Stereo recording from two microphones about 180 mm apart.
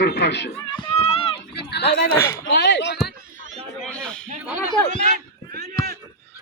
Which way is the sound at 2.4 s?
75° left (ahead or behind).